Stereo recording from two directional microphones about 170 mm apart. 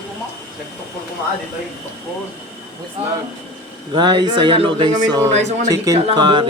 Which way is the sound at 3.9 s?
25° right (ahead or behind).